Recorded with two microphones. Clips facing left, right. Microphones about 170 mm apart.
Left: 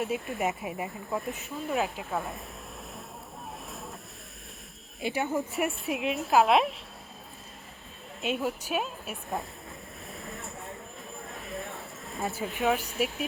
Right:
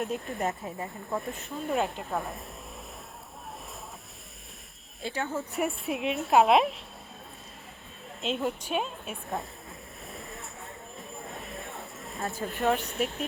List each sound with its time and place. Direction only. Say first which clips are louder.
0.0 s a woman's voice: left 1 dB; centre (ahead or behind)
0.6 s speech: left 2 dB; 15° left (ahead or behind)
1.1 s a woman's voice: right 1 dB; centre (ahead or behind)
5.0 s speech: left 3 dB; 15° left (ahead or behind)
5.5 s a woman's voice: even; centre (ahead or behind)
8.2 s a woman's voice: even; 5° left (ahead or behind)
10.1 s a sound: left 2 dB; centre (ahead or behind)
12.5 s a woman's voice: even; centre (ahead or behind)